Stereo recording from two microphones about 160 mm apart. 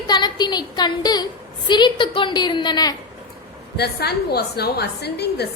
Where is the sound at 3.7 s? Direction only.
85° left.